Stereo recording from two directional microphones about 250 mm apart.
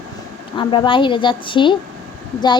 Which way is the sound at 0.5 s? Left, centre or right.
Centre.